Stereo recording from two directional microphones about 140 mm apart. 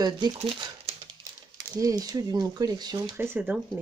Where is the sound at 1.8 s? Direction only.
25° right (ahead or behind).